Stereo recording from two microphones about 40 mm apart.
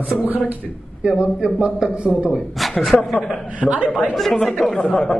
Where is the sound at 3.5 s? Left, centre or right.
Right.